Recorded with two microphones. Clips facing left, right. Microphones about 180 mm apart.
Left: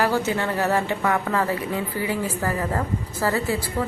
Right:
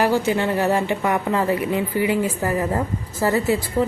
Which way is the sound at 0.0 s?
15° right (ahead or behind).